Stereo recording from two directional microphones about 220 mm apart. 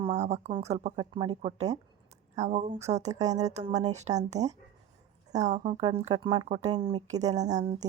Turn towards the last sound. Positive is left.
turn(degrees=-20)  # may be behind; listen again after turning